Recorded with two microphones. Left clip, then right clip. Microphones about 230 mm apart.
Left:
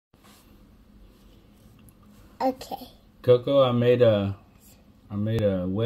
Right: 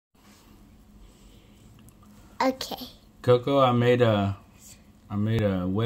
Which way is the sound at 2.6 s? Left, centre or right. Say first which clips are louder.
Right 1 dB; right.